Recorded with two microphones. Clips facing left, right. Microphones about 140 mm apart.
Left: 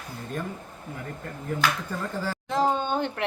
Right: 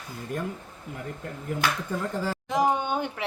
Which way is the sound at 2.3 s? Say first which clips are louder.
Even; 15° right (ahead or behind).